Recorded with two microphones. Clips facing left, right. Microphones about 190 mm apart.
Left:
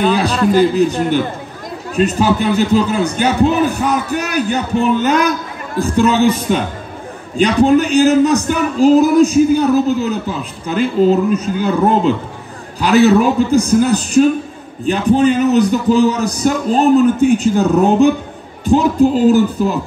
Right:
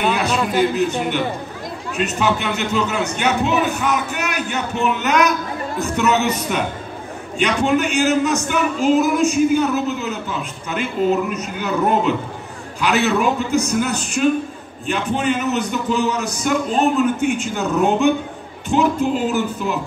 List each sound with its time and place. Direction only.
0.5 s a man's voice: 35° left (ahead or behind)
2.0 s a man's voice: 35° left (ahead or behind)